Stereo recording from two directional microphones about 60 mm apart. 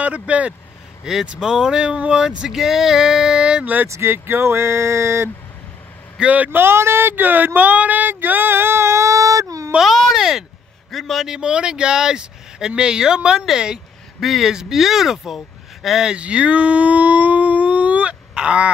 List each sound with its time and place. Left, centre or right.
0.0 s speech: right
1.0 s speech: centre
3.8 s speech: right
6.1 s speech: right
6.6 s female singing: right
9.8 s baby cry: centre
10.9 s speech: centre
16.1 s speech: centre